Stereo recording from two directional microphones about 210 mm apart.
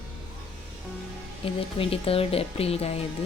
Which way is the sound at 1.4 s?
25° left (ahead or behind).